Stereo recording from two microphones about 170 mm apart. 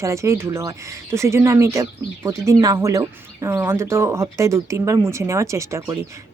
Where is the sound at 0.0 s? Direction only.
15° right (ahead or behind).